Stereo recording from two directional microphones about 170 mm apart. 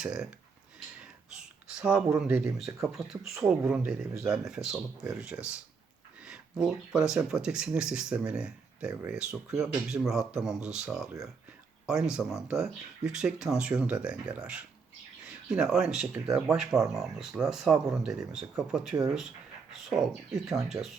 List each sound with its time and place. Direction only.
0.0 s speech: 5° right (ahead or behind)
1.7 s speech: 5° right (ahead or behind)
2.9 s speech: centre (ahead or behind)
20.5 s speech: centre (ahead or behind)